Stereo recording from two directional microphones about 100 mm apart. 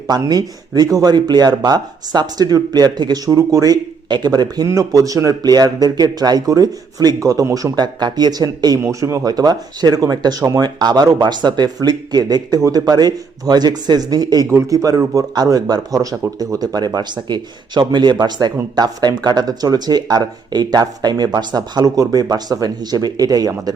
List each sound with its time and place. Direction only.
0.1 s speech: 40° right (ahead or behind)